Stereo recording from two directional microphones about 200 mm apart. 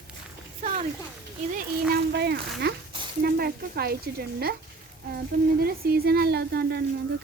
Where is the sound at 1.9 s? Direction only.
55° right (ahead or behind).